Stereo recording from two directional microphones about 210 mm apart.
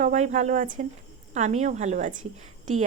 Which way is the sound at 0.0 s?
35° right (ahead or behind).